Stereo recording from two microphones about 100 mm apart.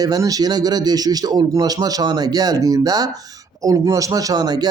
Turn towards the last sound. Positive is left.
turn(degrees=-40)  # may be behind; listen again after turning